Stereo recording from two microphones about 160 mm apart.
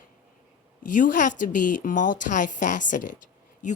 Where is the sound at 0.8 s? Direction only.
55° left (ahead or behind).